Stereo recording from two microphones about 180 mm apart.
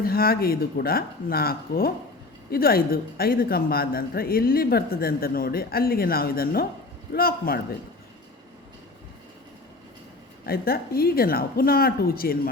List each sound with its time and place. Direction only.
0.0 s a woman's voice: 55° left (ahead or behind)
10.4 s a woman's voice: 55° left (ahead or behind)